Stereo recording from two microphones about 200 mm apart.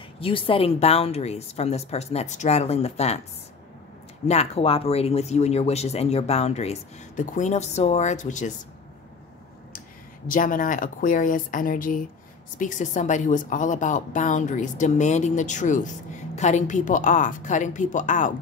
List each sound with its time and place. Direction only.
0.2 s speech: 25° left (ahead or behind)
4.3 s speech: 30° left (ahead or behind)
10.2 s speech: 45° left (ahead or behind)